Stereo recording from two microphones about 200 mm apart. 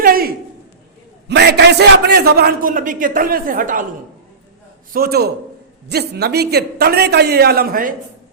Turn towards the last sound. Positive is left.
turn(degrees=-45)  # may be behind; listen again after turning